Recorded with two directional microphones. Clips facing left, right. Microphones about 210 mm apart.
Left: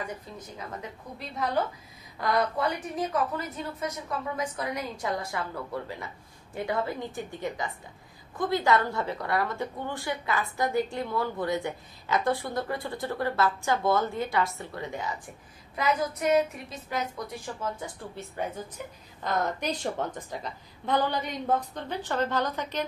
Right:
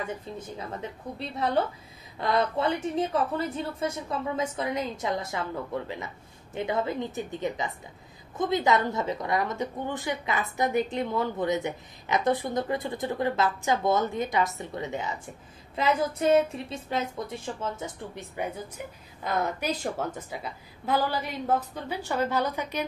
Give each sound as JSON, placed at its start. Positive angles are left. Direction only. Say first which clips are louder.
{"t": 0.0, "sound": "a woman's voice", "louder": "right 3 dB", "side_deg": -25}
{"t": 6.5, "sound": "a woman's voice", "louder": "right 2 dB", "side_deg": -20}
{"t": 18.3, "sound": "a woman's voice", "louder": "even", "side_deg": -10}